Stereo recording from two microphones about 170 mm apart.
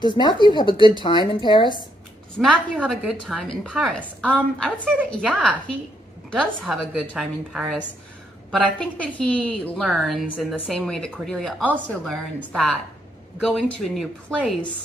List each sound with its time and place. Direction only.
0.0 s a woman's voice: 25° left (ahead or behind)
2.4 s a woman's voice: 5° right (ahead or behind)